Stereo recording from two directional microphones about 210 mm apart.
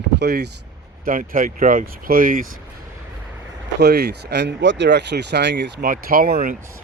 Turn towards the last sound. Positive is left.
turn(degrees=-45)  # may be behind; listen again after turning